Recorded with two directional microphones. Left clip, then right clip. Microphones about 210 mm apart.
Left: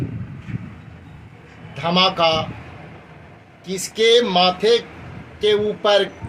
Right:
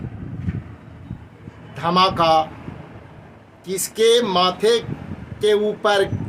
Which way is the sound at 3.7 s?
15° right (ahead or behind).